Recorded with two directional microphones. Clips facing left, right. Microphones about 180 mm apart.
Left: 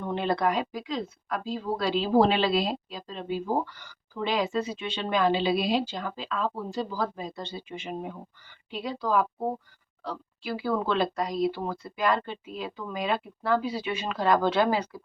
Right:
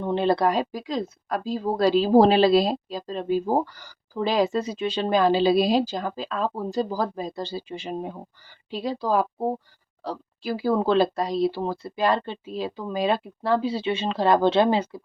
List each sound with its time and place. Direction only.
0.0 s speech: 30° right (ahead or behind)